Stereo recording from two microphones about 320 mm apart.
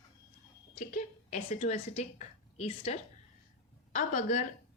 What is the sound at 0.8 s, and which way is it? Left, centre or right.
A woman's voice, left.